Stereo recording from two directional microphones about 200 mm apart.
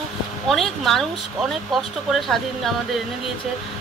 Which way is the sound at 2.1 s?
Centre (ahead or behind).